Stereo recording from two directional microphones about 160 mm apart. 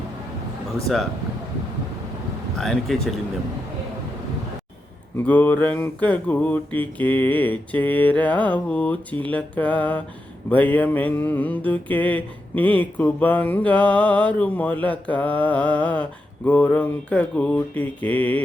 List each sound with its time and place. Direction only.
2.6 s speech: centre (ahead or behind)
5.1 s mantra: 10° left (ahead or behind)